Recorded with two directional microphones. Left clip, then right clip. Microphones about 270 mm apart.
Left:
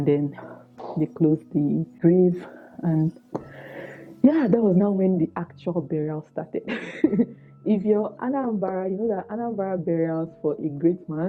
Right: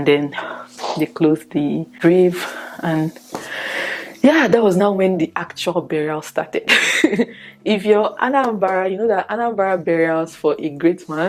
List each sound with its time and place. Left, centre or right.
0.0 s speech: centre
3.5 s a sound: centre
4.9 s speech: centre